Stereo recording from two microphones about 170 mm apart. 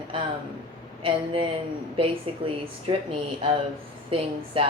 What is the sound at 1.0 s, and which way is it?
Speech, 30° right (ahead or behind).